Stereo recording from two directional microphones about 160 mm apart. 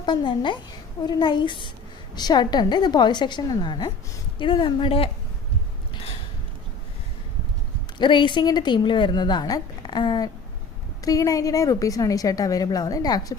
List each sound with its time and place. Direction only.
0.0 s a woman's voice: 30° left (ahead or behind)
7.9 s a woman's voice: 30° left (ahead or behind)